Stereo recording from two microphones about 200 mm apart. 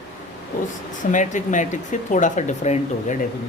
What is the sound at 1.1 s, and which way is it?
Speech, 40° left (ahead or behind).